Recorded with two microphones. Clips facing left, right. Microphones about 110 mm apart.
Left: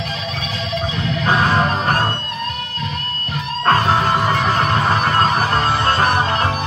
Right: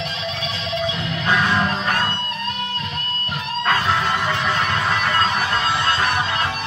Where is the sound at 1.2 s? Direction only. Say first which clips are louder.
Left 3 dB; 40° left (ahead or behind).